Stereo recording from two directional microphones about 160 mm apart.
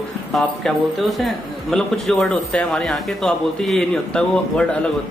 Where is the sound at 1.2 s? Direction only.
Centre (ahead or behind).